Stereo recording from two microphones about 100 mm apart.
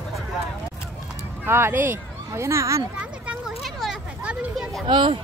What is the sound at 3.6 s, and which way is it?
Children playing, centre (ahead or behind).